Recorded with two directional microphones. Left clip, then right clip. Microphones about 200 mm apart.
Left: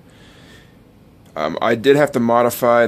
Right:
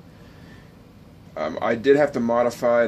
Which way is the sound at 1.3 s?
55° left (ahead or behind).